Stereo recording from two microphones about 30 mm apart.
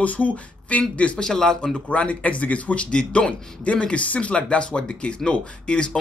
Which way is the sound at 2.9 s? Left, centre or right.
Left.